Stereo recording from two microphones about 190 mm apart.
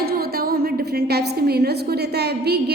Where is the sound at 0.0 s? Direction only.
55° right (ahead or behind).